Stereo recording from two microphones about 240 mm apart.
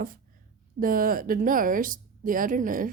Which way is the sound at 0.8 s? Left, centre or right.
Right.